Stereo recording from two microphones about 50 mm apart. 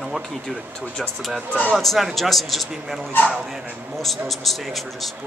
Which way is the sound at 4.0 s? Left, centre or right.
Centre.